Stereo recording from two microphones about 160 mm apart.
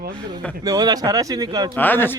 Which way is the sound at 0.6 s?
25° right (ahead or behind).